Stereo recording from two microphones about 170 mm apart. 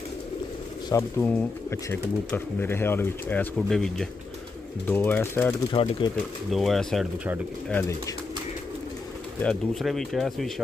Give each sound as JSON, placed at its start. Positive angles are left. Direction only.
{"t": 0.8, "sound": "speech", "side_deg": 15}
{"t": 5.7, "sound": "speech", "side_deg": 30}
{"t": 6.5, "sound": "speech", "side_deg": 0}
{"t": 9.4, "sound": "speech", "side_deg": 0}